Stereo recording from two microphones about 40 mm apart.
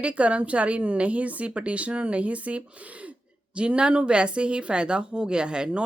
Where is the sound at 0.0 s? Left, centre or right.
Right.